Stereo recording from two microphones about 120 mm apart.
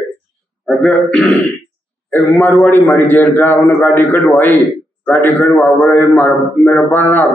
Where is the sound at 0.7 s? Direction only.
5° left (ahead or behind).